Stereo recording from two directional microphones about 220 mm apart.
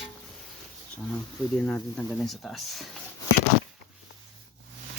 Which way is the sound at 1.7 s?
5° left (ahead or behind).